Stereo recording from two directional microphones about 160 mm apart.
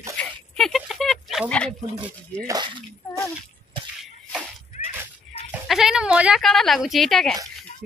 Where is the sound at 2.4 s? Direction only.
25° right (ahead or behind).